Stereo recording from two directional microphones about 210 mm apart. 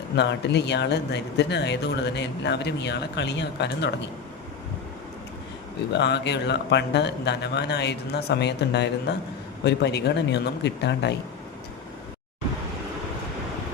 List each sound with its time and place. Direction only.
0.2 s speech: 55° left (ahead or behind)
5.9 s speech: 55° left (ahead or behind)